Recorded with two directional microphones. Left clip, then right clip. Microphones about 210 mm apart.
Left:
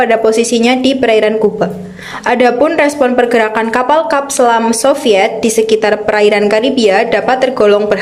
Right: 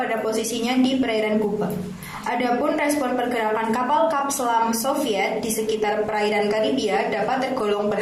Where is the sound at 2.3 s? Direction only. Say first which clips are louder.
Left 12 dB; 40° left (ahead or behind).